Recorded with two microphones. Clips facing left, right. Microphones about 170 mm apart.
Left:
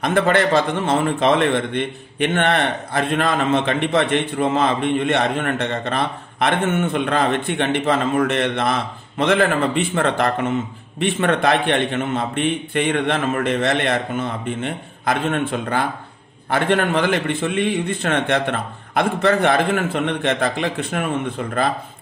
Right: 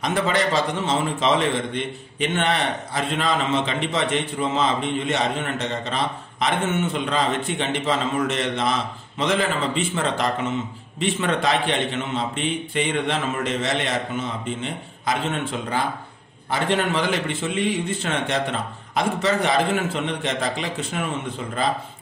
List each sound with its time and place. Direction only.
0.0 s a man's voice: 55° left (ahead or behind)